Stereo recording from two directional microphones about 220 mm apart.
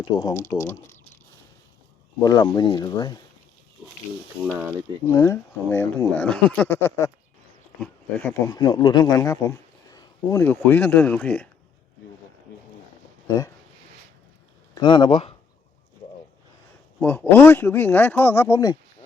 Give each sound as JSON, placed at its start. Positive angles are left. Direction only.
{"t": 0.1, "sound": "speech", "side_deg": 20}
{"t": 2.1, "sound": "speech", "side_deg": 20}
{"t": 5.0, "sound": "speech", "side_deg": 15}
{"t": 13.2, "sound": "speech", "side_deg": 15}
{"t": 14.8, "sound": "speech", "side_deg": 20}
{"t": 17.0, "sound": "speech", "side_deg": 5}